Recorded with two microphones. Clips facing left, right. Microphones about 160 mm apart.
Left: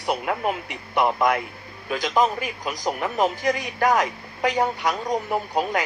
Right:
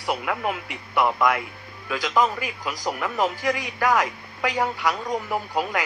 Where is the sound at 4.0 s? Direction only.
20° left (ahead or behind).